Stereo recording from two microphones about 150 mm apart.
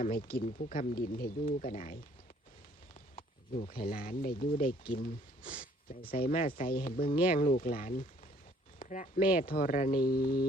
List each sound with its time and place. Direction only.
0.6 s speech: 60° left (ahead or behind)
1.5 s speech: 60° left (ahead or behind)
3.2 s a sound: 40° left (ahead or behind)
3.7 s speech: 75° left (ahead or behind)